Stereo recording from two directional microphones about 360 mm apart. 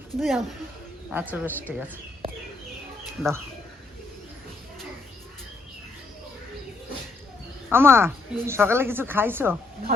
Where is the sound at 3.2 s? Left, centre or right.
Centre.